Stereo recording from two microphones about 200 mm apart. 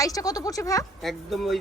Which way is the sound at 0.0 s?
15° left (ahead or behind).